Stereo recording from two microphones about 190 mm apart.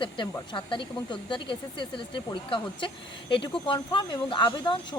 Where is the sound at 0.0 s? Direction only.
25° left (ahead or behind).